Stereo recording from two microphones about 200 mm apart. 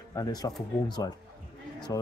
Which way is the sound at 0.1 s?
20° left (ahead or behind).